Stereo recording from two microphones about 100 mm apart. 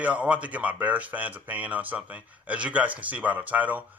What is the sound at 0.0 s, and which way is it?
Speech, 15° right (ahead or behind).